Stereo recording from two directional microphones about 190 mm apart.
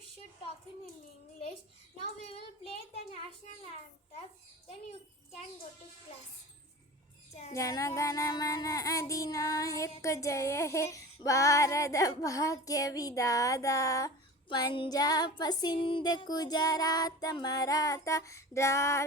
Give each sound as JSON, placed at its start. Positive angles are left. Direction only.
{"t": 3.4, "sound": "a child's voice", "side_deg": 35}
{"t": 7.5, "sound": "child singing", "side_deg": 15}
{"t": 14.5, "sound": "music", "side_deg": 25}